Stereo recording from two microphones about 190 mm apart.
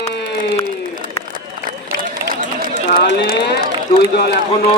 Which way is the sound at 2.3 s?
50° right (ahead or behind).